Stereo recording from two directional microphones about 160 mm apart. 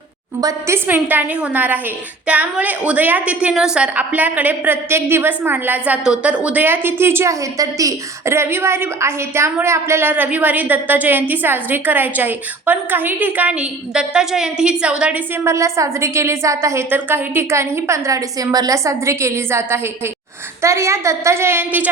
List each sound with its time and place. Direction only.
0.4 s a woman's voice: 15° right (ahead or behind)
15.4 s a woman's voice: 20° right (ahead or behind)